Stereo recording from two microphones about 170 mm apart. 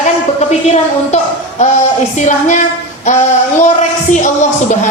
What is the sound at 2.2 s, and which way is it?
Speech, 45° left (ahead or behind).